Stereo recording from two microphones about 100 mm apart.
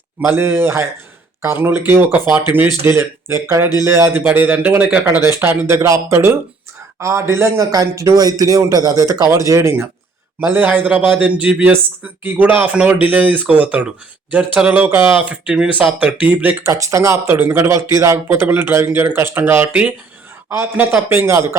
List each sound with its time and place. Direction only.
0.3 s speech: 25° right (ahead or behind)
4.3 s speech: 15° right (ahead or behind)
5.2 s a man's voice: 25° right (ahead or behind)
15.2 s speech: 10° right (ahead or behind)
16.7 s speech: 30° right (ahead or behind)